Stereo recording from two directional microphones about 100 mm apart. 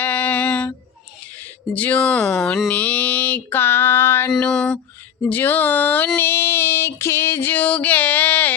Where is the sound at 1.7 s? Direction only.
15° left (ahead or behind).